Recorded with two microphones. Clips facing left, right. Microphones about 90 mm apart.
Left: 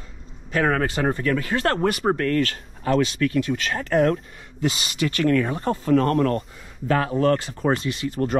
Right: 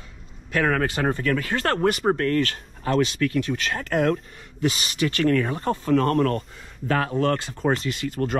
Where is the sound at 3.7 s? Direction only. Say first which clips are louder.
Left 3 dB; 40° left (ahead or behind).